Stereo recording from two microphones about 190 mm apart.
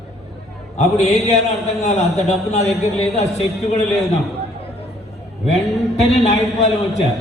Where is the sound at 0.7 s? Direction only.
35° left (ahead or behind).